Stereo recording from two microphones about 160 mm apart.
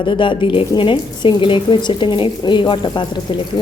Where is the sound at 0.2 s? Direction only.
30° left (ahead or behind).